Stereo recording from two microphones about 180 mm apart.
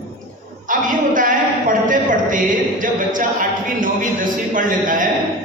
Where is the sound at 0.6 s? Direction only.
50° right (ahead or behind).